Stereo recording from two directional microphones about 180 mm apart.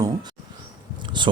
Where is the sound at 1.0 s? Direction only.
25° right (ahead or behind).